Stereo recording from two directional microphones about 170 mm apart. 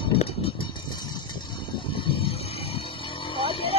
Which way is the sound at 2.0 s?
30° left (ahead or behind).